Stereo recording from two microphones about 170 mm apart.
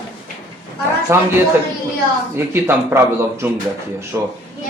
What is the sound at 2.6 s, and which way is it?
Speech, 15° right (ahead or behind).